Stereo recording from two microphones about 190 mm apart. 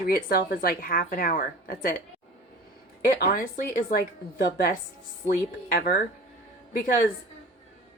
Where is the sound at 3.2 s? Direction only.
45° left (ahead or behind).